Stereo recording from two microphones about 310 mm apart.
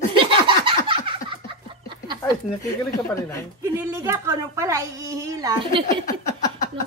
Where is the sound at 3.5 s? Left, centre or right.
Centre.